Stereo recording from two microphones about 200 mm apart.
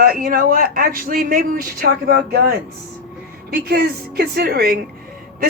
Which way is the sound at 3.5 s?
50° right (ahead or behind).